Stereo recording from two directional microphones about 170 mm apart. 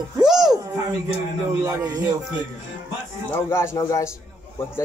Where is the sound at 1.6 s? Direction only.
20° right (ahead or behind).